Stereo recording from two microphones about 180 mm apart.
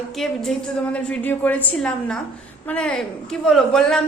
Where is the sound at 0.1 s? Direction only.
Centre (ahead or behind).